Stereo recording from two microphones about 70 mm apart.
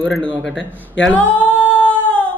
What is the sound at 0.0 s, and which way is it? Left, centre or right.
Speech, centre.